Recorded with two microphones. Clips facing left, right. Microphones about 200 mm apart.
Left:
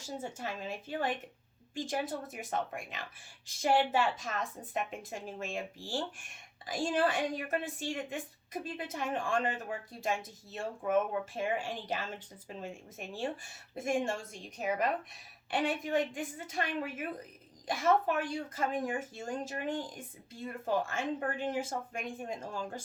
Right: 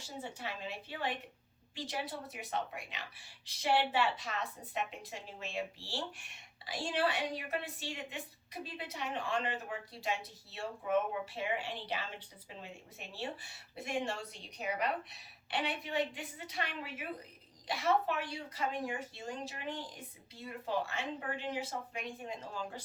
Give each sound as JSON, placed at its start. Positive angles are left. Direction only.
{"t": 0.0, "sound": "speech", "side_deg": 45}